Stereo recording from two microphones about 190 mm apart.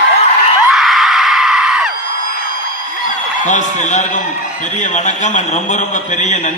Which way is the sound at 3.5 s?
40° left (ahead or behind).